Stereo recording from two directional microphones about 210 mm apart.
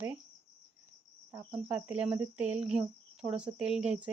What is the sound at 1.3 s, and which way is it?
Speech, 10° right (ahead or behind).